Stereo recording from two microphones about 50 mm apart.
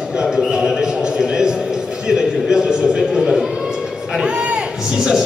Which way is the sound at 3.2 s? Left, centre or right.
Centre.